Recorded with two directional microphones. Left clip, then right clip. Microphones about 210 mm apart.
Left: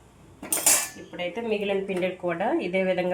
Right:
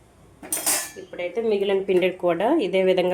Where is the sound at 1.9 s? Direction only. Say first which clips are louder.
Right 7 dB; 45° right (ahead or behind).